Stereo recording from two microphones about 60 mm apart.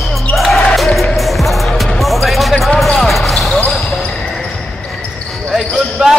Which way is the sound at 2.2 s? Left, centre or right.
Centre.